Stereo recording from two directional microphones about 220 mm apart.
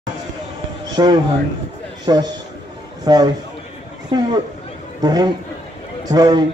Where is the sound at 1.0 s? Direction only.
20° right (ahead or behind).